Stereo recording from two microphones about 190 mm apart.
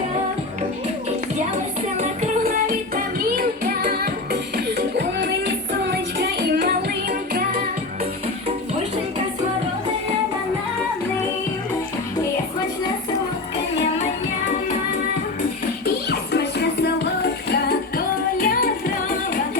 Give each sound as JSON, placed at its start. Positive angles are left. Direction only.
{"t": 2.9, "sound": "music", "side_deg": -50}
{"t": 16.0, "sound": "music", "side_deg": 60}